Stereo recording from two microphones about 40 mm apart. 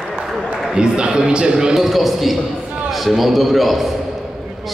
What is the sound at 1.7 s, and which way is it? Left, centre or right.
A man's voice, centre.